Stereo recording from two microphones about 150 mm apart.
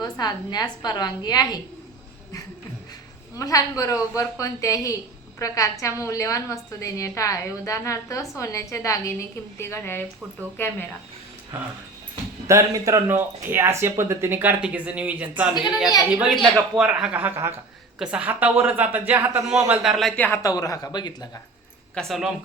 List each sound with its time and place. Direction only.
0.0 s a woman's voice: 25° left (ahead or behind)
3.3 s a woman's voice: 20° left (ahead or behind)
12.5 s a man's voice: 20° right (ahead or behind); by 20.2 s centre (ahead or behind)
20.2 s a woman's voice: 20° left (ahead or behind)
21.9 s a man's voice: centre (ahead or behind)